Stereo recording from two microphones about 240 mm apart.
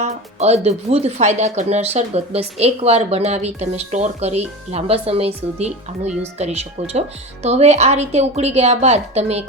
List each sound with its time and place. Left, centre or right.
0.0 s speech: right